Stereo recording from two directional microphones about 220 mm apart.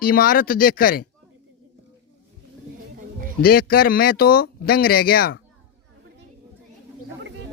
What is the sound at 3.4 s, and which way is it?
Speech, 45° left (ahead or behind).